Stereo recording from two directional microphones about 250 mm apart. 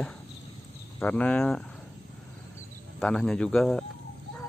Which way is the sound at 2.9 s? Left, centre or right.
Centre.